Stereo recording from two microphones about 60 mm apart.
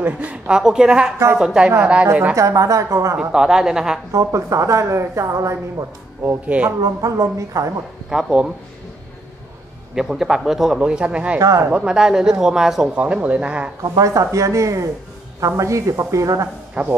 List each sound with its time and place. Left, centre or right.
0.0 s speech: right
2.3 s a woman's voice: right
3.2 s speech: centre
4.1 s a woman's voice: right
6.4 s speech: right
6.8 s a woman's voice: right
8.1 s speech: centre
9.9 s speech: centre
10.8 s speech: centre
11.3 s a woman's voice: right
11.7 s speech: centre
12.9 s speech: right
13.8 s a woman's voice: right